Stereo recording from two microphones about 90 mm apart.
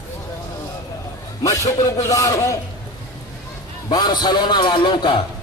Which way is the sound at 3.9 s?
50° left (ahead or behind).